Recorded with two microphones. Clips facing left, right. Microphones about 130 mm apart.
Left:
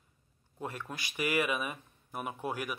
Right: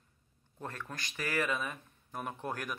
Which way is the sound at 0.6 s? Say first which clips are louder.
Left 2 dB; 10° left (ahead or behind).